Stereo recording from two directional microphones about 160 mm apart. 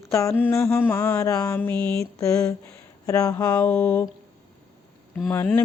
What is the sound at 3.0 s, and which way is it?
Speech, 20° left (ahead or behind).